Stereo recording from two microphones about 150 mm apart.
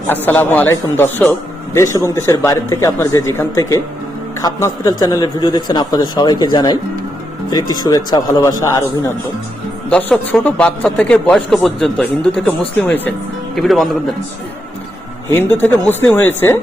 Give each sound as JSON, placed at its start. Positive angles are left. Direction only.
{"t": 0.3, "sound": "a man's voice", "side_deg": 10}
{"t": 9.9, "sound": "a man's voice", "side_deg": 10}
{"t": 13.6, "sound": "a man's voice", "side_deg": 0}
{"t": 15.3, "sound": "a man's voice", "side_deg": 15}